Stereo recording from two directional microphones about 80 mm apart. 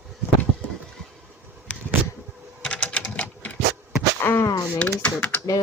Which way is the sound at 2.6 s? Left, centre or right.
Centre.